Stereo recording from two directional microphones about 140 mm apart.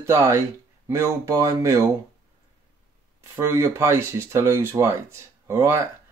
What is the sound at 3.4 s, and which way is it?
Speech, 20° right (ahead or behind).